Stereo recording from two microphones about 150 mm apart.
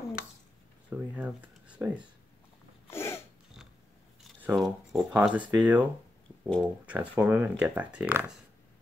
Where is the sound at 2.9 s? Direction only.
15° left (ahead or behind).